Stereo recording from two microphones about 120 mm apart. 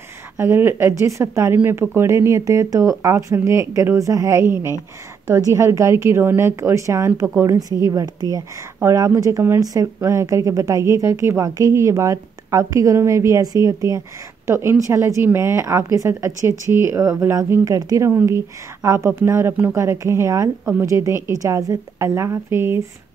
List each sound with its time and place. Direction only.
0.4 s speech: 20° right (ahead or behind)